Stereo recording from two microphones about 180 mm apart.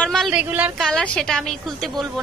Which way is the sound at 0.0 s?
Centre (ahead or behind).